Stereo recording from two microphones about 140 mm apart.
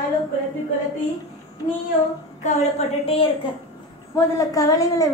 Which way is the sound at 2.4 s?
50° left (ahead or behind).